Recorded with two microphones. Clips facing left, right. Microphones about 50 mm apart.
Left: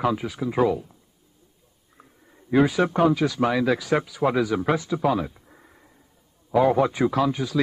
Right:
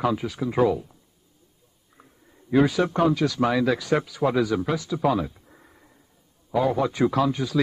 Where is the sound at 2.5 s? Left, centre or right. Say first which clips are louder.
Left 1 dB; centre.